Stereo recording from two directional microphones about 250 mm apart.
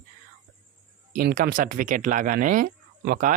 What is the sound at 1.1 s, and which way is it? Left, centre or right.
Speech, right.